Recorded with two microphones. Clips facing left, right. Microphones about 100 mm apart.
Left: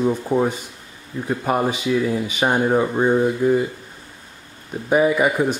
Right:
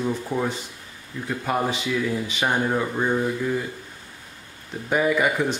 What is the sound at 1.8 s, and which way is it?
Speech, 25° left (ahead or behind).